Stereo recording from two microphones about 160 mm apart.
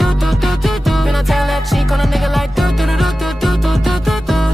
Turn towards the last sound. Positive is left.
turn(degrees=0)  # may be behind; listen again after turning